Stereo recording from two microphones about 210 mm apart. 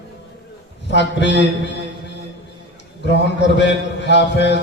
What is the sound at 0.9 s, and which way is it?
Speech, 55° left (ahead or behind).